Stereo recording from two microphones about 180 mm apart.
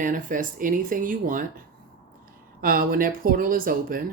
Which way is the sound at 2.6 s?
55° right (ahead or behind).